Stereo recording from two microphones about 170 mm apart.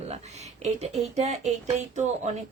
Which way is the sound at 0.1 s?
40° right (ahead or behind).